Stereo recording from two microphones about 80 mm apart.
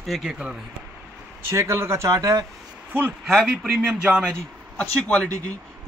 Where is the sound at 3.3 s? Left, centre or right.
Centre.